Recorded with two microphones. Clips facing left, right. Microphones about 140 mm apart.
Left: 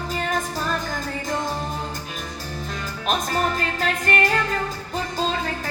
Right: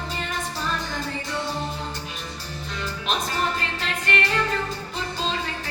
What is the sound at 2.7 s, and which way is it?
Music, 45° left (ahead or behind).